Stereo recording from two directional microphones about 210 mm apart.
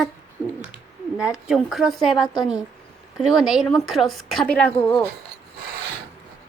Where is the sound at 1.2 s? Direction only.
5° right (ahead or behind).